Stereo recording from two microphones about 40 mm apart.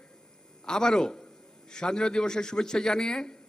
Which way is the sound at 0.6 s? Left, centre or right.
Centre.